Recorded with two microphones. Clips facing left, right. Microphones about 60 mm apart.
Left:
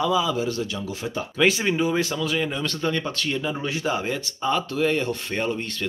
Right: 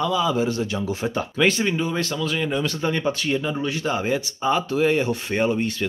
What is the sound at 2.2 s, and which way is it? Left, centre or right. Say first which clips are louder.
Speech: right 1 dB; centre.